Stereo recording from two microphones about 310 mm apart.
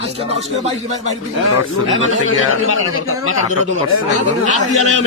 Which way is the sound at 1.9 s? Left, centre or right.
Left.